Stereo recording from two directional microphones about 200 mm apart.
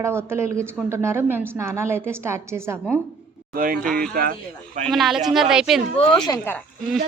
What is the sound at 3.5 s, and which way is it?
Speech, 45° right (ahead or behind).